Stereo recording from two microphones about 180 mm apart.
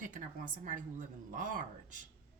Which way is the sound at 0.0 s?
45° right (ahead or behind).